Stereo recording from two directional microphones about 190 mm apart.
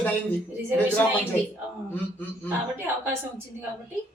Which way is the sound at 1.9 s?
10° left (ahead or behind).